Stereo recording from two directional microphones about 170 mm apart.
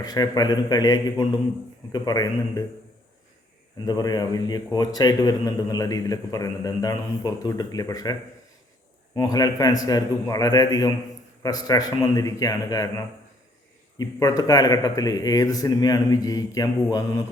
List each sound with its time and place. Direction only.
0.0 s a man's voice: 20° left (ahead or behind)
3.8 s a man's voice: 25° left (ahead or behind)
9.1 s a man's voice: 20° left (ahead or behind)